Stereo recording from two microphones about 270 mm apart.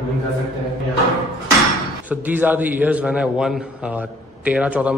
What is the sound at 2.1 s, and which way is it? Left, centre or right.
A man's voice, centre.